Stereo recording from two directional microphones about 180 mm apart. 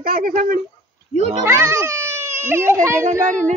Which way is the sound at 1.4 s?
15° right (ahead or behind).